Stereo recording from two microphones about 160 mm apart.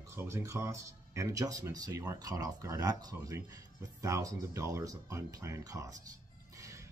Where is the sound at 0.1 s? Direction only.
15° right (ahead or behind).